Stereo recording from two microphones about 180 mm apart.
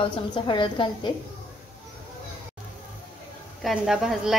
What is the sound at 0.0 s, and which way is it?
Speech, 25° left (ahead or behind).